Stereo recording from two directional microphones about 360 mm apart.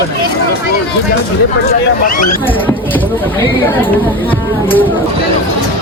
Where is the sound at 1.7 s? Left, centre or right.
Left.